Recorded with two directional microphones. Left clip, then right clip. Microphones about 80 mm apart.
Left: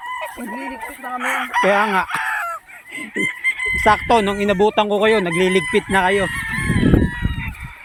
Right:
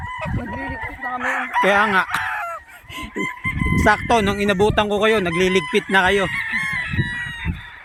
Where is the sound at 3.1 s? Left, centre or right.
Right.